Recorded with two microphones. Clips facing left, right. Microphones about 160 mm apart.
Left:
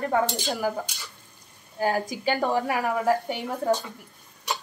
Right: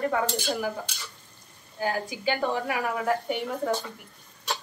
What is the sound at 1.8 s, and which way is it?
Speech, 40° left (ahead or behind).